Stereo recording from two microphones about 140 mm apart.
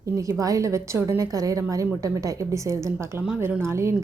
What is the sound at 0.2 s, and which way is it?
A woman's voice, 25° right (ahead or behind).